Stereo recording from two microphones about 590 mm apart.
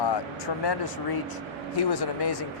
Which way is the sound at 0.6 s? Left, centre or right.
Left.